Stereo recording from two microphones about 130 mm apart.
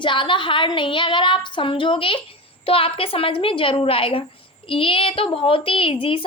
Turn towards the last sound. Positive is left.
turn(degrees=45)  # may be behind; listen again after turning